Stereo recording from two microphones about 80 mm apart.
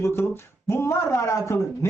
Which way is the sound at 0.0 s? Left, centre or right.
Left.